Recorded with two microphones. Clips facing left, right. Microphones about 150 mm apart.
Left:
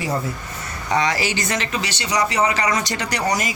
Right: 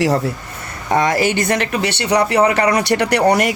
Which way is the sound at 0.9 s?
50° right (ahead or behind).